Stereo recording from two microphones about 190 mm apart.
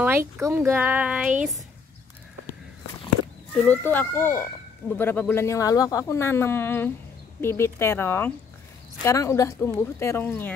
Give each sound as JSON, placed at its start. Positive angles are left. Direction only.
{"t": 0.0, "sound": "speech", "side_deg": -15}
{"t": 3.6, "sound": "speech", "side_deg": 10}